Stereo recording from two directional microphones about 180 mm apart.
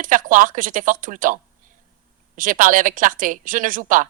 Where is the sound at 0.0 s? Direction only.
50° right (ahead or behind).